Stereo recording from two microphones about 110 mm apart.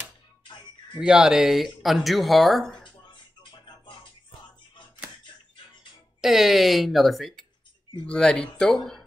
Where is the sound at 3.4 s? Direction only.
45° left (ahead or behind).